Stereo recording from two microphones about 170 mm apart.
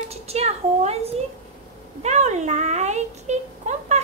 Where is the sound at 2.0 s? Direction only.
45° right (ahead or behind).